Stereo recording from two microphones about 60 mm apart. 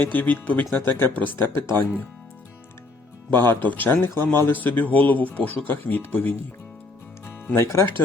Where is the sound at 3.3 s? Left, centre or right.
Left.